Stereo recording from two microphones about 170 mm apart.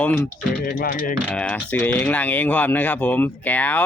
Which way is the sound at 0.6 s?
60° left (ahead or behind).